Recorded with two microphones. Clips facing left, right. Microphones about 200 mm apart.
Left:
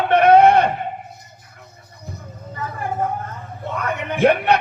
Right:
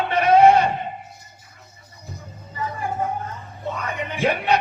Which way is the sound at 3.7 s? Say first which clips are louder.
Left 5 dB; 55° left (ahead or behind).